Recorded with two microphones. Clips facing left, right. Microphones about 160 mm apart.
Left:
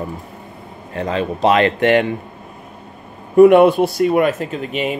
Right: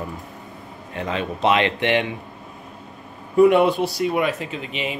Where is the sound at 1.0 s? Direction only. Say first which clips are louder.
Left 5 dB; 35° left (ahead or behind).